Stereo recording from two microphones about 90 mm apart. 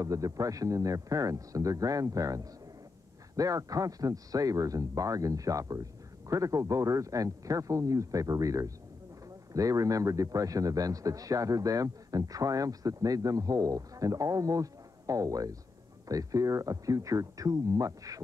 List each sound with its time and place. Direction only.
0.0 s a man's voice: 40° right (ahead or behind)